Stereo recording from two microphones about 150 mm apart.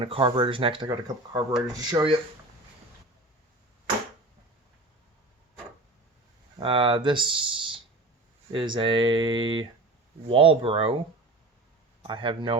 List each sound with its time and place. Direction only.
0.0 s speech: 35° right (ahead or behind)
0.9 s speech: 20° right (ahead or behind)
6.6 s speech: 35° right (ahead or behind)
12.0 s speech: 30° right (ahead or behind)